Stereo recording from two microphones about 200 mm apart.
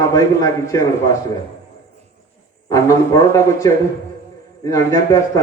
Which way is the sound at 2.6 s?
15° left (ahead or behind).